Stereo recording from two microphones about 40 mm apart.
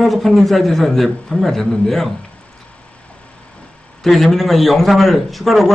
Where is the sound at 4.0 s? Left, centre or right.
Centre.